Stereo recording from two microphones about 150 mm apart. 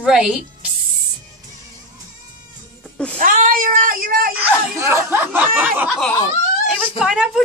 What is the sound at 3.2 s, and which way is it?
Speech, 65° right (ahead or behind).